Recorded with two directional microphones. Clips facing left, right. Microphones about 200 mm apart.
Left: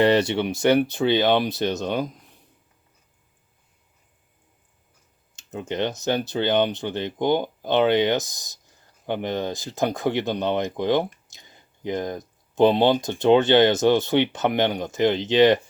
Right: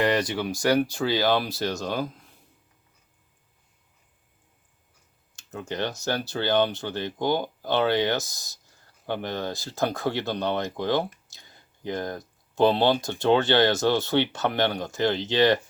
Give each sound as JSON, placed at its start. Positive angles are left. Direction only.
{"t": 0.0, "sound": "speech", "side_deg": 25}
{"t": 5.4, "sound": "speech", "side_deg": 20}